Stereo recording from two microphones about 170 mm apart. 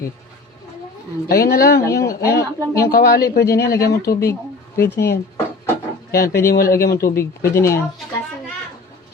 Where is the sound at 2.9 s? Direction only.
65° left (ahead or behind).